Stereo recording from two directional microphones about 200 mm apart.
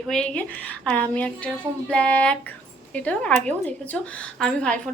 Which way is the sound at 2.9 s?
5° left (ahead or behind).